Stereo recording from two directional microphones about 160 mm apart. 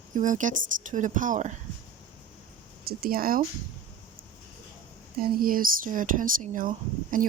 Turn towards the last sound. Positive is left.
turn(degrees=-55)  # may be behind; listen again after turning